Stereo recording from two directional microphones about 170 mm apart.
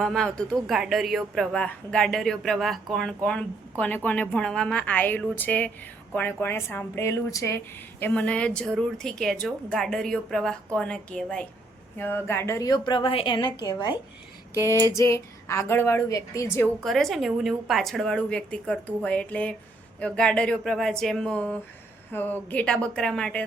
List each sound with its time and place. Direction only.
0.0 s a woman's voice: centre (ahead or behind); by 13.9 s 25° left (ahead or behind)
15.1 s speech: 15° left (ahead or behind)
16.8 s speech: centre (ahead or behind)